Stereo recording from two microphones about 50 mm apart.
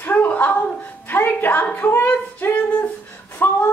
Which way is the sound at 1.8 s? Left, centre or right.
Left.